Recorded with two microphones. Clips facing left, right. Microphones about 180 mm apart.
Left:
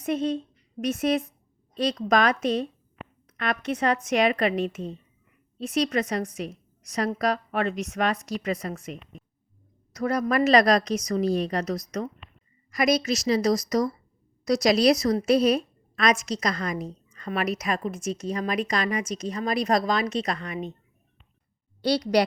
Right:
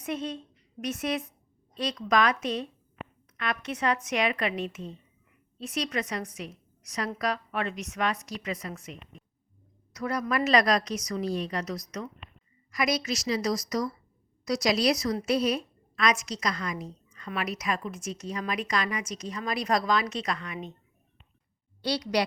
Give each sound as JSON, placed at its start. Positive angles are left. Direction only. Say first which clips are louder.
{"t": 0.0, "sound": "a woman's voice", "louder": "left 7 dB", "side_deg": 40}
{"t": 15.3, "sound": "a sound", "louder": "left 6 dB", "side_deg": 55}
{"t": 16.4, "sound": "a woman's voice", "louder": "left 4 dB", "side_deg": 55}
{"t": 18.4, "sound": "a woman's voice", "louder": "left 3 dB", "side_deg": 30}
{"t": 19.2, "sound": "a woman's voice", "louder": "left 5 dB", "side_deg": 40}
{"t": 19.5, "sound": "a woman's voice", "louder": "left 2 dB", "side_deg": 50}
{"t": 21.8, "sound": "a woman's voice", "louder": "left 6 dB", "side_deg": 45}